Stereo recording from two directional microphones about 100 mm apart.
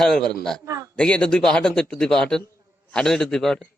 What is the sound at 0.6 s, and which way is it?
Speech, 30° right (ahead or behind).